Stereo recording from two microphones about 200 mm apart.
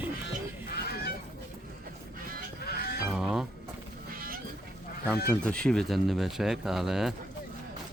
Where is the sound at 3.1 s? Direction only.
5° right (ahead or behind).